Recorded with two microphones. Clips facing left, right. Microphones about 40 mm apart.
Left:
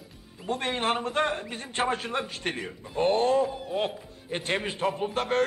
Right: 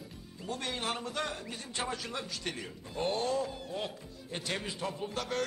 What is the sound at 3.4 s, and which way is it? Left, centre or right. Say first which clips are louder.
Speech: left 7 dB; centre.